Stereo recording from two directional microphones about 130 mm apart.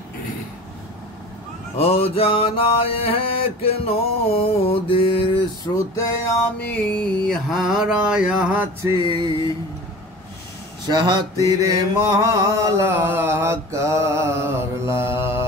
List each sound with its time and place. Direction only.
1.8 s mantra: 50° left (ahead or behind)
5.8 s music: 25° left (ahead or behind)
6.6 s mantra: 10° left (ahead or behind); by 8.6 s 5° right (ahead or behind)
9.0 s a sound: 35° right (ahead or behind)
10.9 s mantra: 35° right (ahead or behind); by 15.4 s 20° right (ahead or behind)